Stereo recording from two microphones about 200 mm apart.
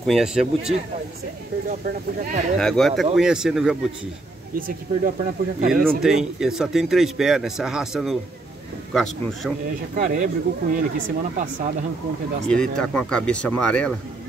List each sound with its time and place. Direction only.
0.0 s speech: centre (ahead or behind)
1.7 s speech: 40° right (ahead or behind)
2.6 s speech: centre (ahead or behind)
4.6 s speech: 45° right (ahead or behind)
5.7 s speech: centre (ahead or behind)
9.9 s speech: 40° right (ahead or behind)
12.4 s speech: 5° left (ahead or behind)